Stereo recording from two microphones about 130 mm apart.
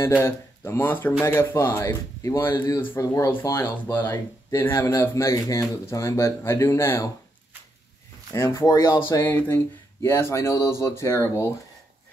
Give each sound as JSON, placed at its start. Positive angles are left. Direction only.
{"t": 0.0, "sound": "speech", "side_deg": 20}
{"t": 8.3, "sound": "speech", "side_deg": 25}